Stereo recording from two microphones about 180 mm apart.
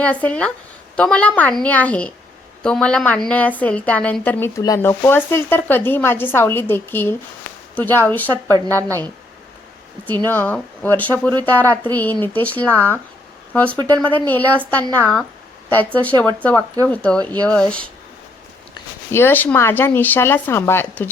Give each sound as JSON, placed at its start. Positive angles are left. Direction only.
{"t": 0.0, "sound": "a woman's voice", "side_deg": 5}
{"t": 8.4, "sound": "a woman's voice", "side_deg": -20}
{"t": 10.2, "sound": "a woman's voice", "side_deg": 10}
{"t": 19.1, "sound": "a woman's voice", "side_deg": 10}